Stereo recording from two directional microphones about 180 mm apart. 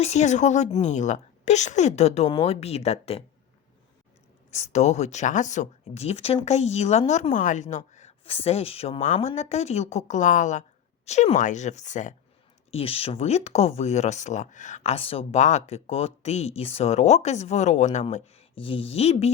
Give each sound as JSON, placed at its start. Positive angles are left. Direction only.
{"t": 0.0, "sound": "speech", "side_deg": 40}
{"t": 4.5, "sound": "speech", "side_deg": 40}
{"t": 12.7, "sound": "speech", "side_deg": 30}